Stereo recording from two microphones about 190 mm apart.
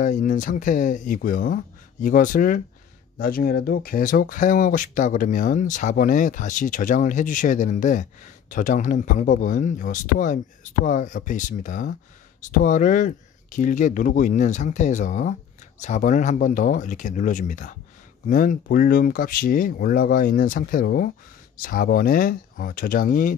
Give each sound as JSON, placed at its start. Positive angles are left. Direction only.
{"t": 0.0, "sound": "speech", "side_deg": 45}